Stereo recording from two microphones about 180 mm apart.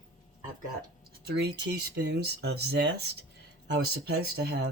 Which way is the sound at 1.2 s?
65° right (ahead or behind).